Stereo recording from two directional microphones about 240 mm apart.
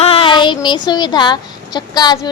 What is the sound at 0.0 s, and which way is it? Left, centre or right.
A woman's voice, left.